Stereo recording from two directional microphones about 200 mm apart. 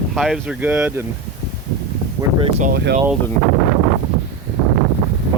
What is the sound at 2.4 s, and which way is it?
Speech, 35° right (ahead or behind).